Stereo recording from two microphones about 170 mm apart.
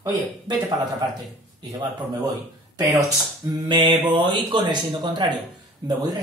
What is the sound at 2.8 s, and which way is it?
A man's voice, 20° right (ahead or behind).